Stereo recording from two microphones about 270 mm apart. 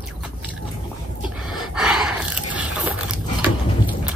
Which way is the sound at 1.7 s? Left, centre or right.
Centre.